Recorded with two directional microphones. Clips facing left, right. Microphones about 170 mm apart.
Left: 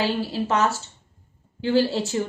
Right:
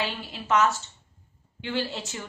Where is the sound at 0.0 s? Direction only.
35° left (ahead or behind).